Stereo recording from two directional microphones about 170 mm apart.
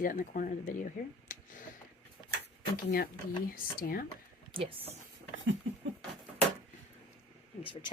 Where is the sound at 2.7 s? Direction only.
60° left (ahead or behind).